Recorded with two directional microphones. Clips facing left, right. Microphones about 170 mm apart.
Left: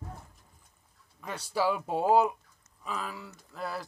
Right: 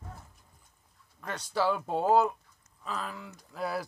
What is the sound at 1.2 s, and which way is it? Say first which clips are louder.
Speech: even; 10° left (ahead or behind).